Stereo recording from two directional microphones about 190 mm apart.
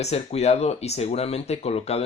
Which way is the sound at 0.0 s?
35° left (ahead or behind).